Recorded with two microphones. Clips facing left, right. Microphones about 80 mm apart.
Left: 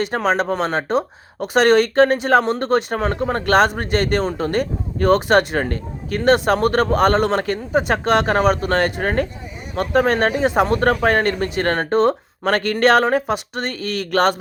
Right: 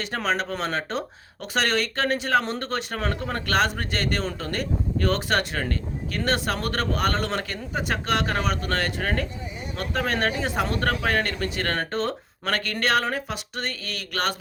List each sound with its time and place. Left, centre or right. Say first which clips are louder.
0.0 s a man's voice: left 7 dB; left
5.5 s a man's voice: left 6 dB; left